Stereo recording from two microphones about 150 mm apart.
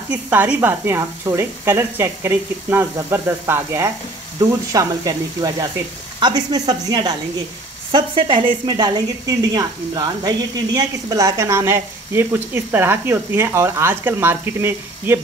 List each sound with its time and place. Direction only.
0.1 s a woman's voice: 10° right (ahead or behind)